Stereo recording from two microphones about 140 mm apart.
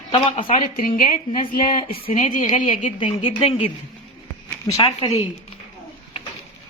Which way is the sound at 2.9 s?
35° left (ahead or behind).